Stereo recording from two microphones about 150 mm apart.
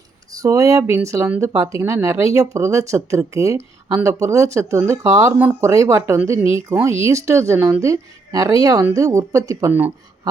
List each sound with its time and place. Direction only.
0.3 s speech: 20° right (ahead or behind)